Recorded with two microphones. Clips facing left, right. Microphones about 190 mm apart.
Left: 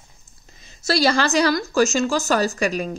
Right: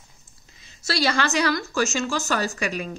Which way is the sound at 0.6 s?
45° left (ahead or behind).